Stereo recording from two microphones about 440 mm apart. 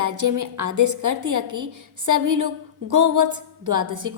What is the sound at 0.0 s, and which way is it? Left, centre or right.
A woman's voice, right.